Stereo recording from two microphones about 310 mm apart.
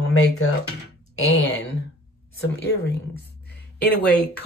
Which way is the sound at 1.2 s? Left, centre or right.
Left.